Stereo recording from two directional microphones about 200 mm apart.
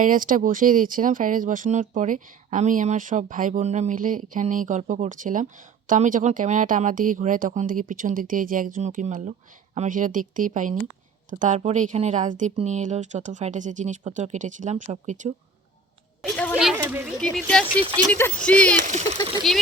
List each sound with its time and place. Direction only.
0.0 s speech: 40° right (ahead or behind)
16.3 s speech: 5° left (ahead or behind)
16.7 s speech: 10° right (ahead or behind)
17.2 s speech: 5° left (ahead or behind)
18.9 s speech: 35° right (ahead or behind)